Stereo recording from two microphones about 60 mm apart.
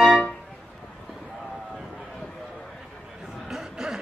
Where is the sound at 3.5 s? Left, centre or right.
Centre.